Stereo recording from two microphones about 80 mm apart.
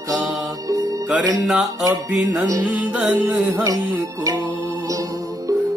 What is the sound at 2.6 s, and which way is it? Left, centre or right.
Music, centre.